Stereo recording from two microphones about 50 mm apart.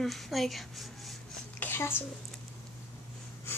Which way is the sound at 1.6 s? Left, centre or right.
Left.